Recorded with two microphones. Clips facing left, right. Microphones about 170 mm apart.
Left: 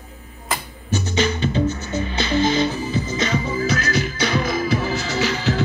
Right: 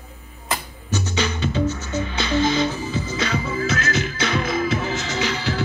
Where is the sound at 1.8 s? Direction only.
40° left (ahead or behind).